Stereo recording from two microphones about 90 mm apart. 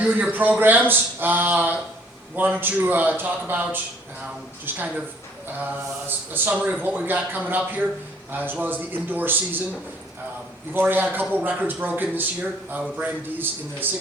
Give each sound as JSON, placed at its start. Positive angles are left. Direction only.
{"t": 0.0, "sound": "a man's voice", "side_deg": -20}
{"t": 6.1, "sound": "a man's voice", "side_deg": -20}
{"t": 10.8, "sound": "a man's voice", "side_deg": -20}